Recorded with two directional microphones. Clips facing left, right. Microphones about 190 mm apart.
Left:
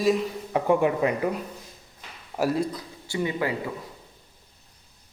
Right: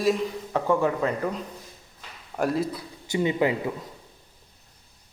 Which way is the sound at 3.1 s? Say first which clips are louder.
Right 4 dB; 20° right (ahead or behind).